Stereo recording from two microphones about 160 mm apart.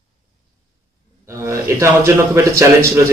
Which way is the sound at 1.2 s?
15° right (ahead or behind).